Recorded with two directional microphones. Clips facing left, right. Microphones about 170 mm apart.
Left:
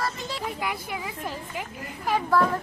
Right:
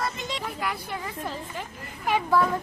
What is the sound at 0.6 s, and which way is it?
A woman's voice, 10° left (ahead or behind).